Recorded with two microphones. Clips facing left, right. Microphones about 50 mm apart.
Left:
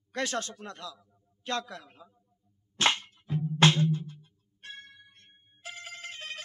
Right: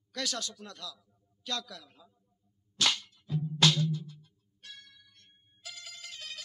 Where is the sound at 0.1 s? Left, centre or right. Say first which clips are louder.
Left 5 dB; left.